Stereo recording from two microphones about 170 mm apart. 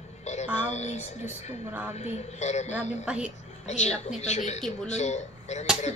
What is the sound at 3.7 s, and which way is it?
A man's voice, 40° left (ahead or behind).